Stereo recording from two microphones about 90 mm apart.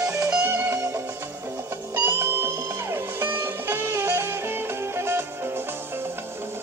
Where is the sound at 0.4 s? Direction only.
25° right (ahead or behind).